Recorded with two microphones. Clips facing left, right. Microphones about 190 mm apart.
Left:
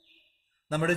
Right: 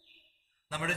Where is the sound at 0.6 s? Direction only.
45° left (ahead or behind).